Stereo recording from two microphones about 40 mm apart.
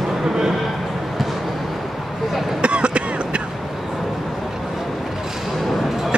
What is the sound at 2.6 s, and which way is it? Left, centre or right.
Cough, right.